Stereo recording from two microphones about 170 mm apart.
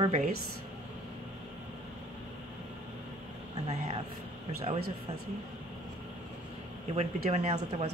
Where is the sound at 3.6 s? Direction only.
35° right (ahead or behind).